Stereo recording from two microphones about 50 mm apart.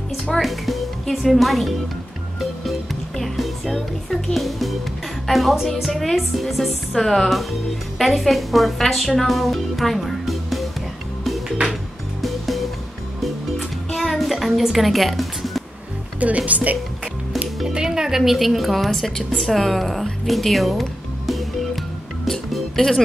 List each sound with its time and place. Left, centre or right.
0.3 s speech: centre
3.2 s speech: centre
12.2 s music: centre
13.9 s music: centre
16.2 s speech: right
17.7 s speech: centre
18.9 s speech: centre
22.3 s music: centre